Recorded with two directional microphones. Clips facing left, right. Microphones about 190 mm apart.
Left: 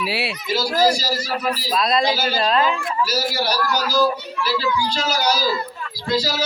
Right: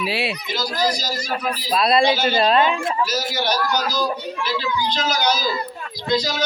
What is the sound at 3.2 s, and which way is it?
A man's voice, 5° left (ahead or behind).